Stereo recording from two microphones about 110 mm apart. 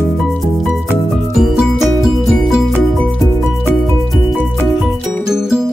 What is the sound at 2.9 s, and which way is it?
Music, centre (ahead or behind).